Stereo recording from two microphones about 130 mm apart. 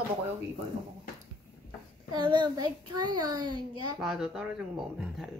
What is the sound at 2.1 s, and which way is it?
A child's voice, 35° right (ahead or behind).